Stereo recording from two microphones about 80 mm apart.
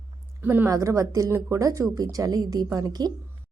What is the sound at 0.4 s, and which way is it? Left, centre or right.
Speech, right.